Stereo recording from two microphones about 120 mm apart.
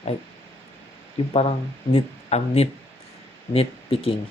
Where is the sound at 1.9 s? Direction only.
60° left (ahead or behind).